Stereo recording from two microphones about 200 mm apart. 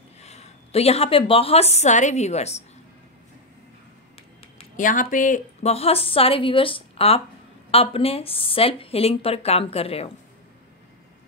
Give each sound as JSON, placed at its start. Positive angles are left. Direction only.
{"t": 0.2, "sound": "a woman's voice", "side_deg": 30}
{"t": 4.6, "sound": "a woman's voice", "side_deg": 40}